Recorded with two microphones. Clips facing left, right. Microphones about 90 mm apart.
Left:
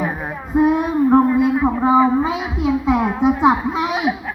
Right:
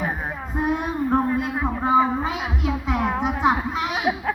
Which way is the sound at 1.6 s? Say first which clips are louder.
Left 1 dB; 15° left (ahead or behind).